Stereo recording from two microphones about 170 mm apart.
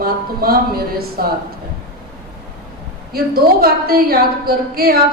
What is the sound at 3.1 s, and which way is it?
A woman's voice, 65° right (ahead or behind).